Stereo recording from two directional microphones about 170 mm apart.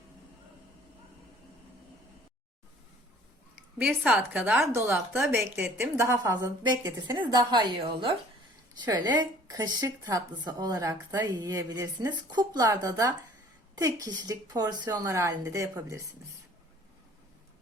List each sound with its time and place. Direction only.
3.8 s a woman's voice: 10° right (ahead or behind)